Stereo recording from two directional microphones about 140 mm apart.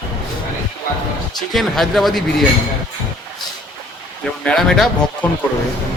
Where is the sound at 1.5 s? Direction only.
Centre (ahead or behind).